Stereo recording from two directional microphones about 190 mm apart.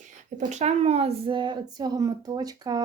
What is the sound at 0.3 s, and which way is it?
A woman's voice, 35° right (ahead or behind).